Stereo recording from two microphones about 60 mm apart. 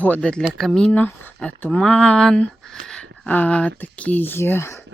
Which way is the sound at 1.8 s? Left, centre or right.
Centre.